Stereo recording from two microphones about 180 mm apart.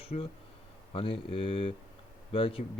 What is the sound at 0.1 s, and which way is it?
Speech, 40° left (ahead or behind).